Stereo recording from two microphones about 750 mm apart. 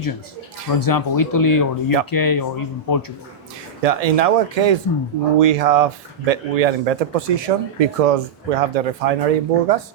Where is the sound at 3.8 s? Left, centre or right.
Right.